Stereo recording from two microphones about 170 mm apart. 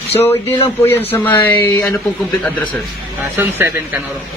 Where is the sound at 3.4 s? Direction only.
15° right (ahead or behind).